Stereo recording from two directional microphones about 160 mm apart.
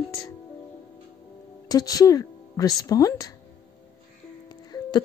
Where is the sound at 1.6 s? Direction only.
25° left (ahead or behind).